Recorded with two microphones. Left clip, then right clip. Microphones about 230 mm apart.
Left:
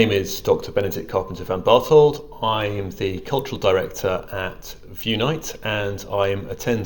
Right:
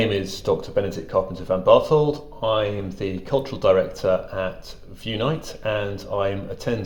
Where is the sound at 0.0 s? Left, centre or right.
Left.